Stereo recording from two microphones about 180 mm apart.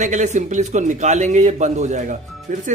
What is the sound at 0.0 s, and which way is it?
Speech, 40° right (ahead or behind).